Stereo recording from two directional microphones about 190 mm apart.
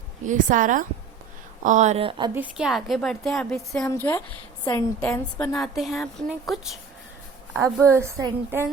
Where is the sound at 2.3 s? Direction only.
5° right (ahead or behind).